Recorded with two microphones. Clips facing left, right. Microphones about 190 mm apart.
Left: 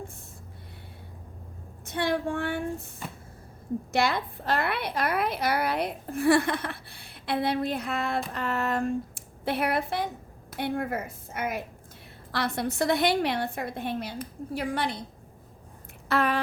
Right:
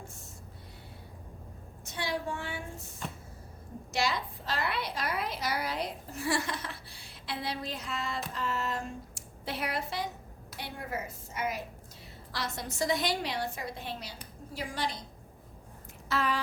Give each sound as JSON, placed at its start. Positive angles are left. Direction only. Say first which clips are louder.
{"t": 1.8, "sound": "a woman's voice", "louder": "left 7 dB", "side_deg": 55}
{"t": 3.9, "sound": "a woman's voice", "louder": "left 5 dB", "side_deg": 55}
{"t": 16.0, "sound": "a sound", "louder": "left 6 dB", "side_deg": 60}